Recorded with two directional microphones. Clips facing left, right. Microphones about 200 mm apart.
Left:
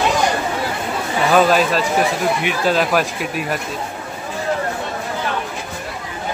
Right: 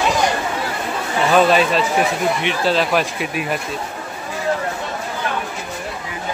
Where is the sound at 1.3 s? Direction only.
5° left (ahead or behind).